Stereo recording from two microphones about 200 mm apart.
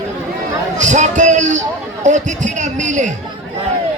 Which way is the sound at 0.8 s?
35° right (ahead or behind).